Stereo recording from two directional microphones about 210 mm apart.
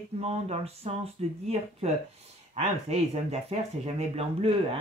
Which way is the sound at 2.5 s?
30° right (ahead or behind).